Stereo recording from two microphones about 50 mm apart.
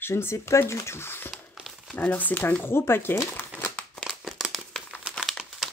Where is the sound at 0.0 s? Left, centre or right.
Left.